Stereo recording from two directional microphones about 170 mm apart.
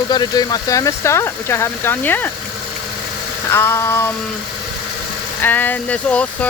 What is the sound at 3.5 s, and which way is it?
Speech, 15° left (ahead or behind).